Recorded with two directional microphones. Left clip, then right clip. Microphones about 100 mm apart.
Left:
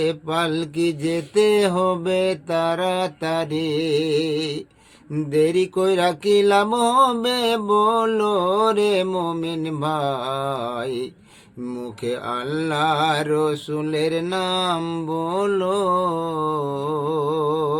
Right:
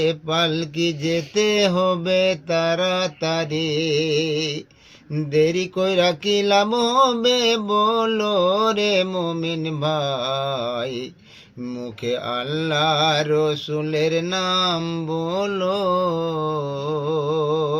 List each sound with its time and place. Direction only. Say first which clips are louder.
0.0 s mantra: right 2 dB; 35° left (ahead or behind)